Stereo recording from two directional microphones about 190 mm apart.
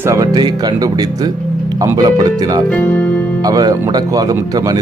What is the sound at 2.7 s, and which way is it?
Speech, 10° left (ahead or behind).